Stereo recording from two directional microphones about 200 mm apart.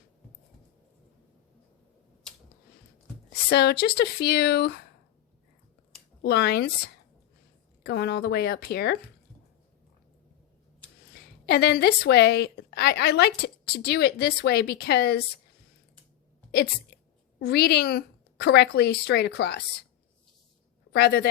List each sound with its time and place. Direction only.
3.5 s a woman's voice: 55° left (ahead or behind)
6.2 s a woman's voice: 55° left (ahead or behind)
11.1 s a woman's voice: 55° left (ahead or behind)
16.9 s a sound: 50° left (ahead or behind)
17.4 s speech: 55° left (ahead or behind)
20.9 s speech: 55° left (ahead or behind)